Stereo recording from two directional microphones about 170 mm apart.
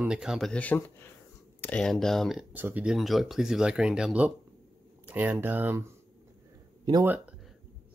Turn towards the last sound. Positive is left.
turn(degrees=-25)  # may be behind; listen again after turning